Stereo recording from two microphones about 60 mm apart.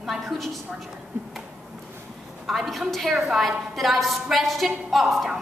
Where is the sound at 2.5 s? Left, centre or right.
Centre.